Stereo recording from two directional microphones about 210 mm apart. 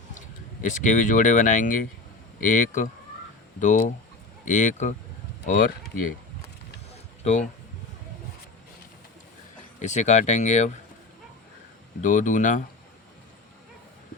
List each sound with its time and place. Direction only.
0.6 s speech: 35° left (ahead or behind)
6.9 s a sound: 35° left (ahead or behind)
9.8 s speech: 35° left (ahead or behind)
12.0 s speech: 35° left (ahead or behind)